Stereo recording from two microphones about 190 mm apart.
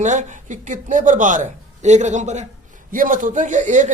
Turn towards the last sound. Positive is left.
turn(degrees=-40)  # may be behind; listen again after turning